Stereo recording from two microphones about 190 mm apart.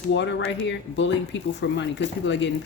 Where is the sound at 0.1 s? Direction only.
70° left (ahead or behind).